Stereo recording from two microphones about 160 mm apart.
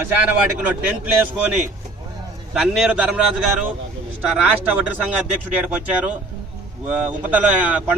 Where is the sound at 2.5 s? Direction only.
5° right (ahead or behind).